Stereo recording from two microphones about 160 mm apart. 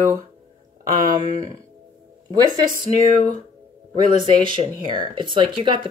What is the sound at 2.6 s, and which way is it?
Speech, 60° right (ahead or behind).